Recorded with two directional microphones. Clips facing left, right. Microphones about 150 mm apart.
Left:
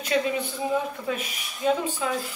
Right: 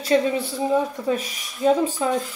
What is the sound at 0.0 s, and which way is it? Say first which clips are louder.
A woman's voice: right 5 dB; 35° right (ahead or behind).